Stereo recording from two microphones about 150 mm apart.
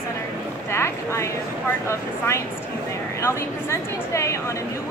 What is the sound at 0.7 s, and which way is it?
A woman's voice, 20° left (ahead or behind).